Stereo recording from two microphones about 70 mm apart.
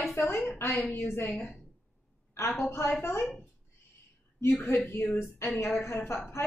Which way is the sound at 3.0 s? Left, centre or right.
Left.